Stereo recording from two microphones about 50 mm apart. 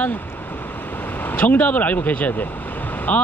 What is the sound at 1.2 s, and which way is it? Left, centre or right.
Speech, left.